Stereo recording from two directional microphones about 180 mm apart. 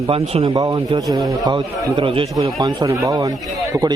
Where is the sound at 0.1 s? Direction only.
30° right (ahead or behind).